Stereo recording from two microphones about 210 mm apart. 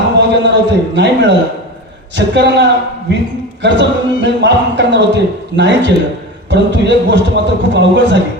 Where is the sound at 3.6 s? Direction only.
55° right (ahead or behind).